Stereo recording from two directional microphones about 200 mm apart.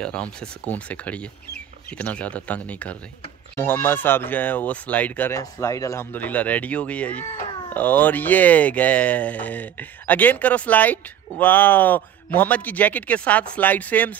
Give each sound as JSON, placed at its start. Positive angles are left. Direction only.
{"t": 0.0, "sound": "speech", "side_deg": 5}